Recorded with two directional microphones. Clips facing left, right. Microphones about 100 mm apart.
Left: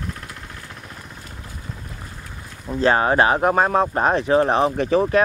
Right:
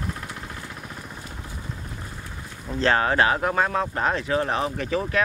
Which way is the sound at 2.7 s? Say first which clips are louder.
Left 4 dB; 15° left (ahead or behind).